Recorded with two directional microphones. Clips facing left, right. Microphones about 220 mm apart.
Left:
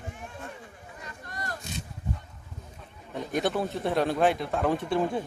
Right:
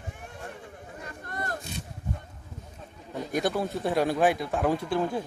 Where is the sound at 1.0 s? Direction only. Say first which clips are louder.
Right 4 dB; 50° right (ahead or behind).